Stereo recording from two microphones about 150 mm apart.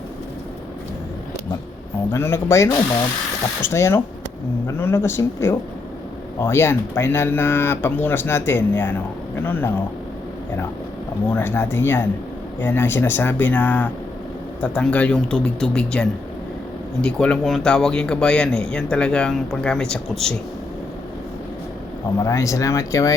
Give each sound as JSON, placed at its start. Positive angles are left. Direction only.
{"t": 2.1, "sound": "speech", "side_deg": 15}
{"t": 11.3, "sound": "speech", "side_deg": 15}
{"t": 22.2, "sound": "speech", "side_deg": 20}